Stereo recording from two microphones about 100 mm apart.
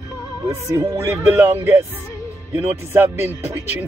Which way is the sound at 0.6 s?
30° right (ahead or behind).